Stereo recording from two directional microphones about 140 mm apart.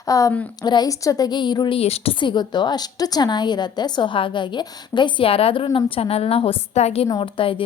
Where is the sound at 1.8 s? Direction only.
45° left (ahead or behind).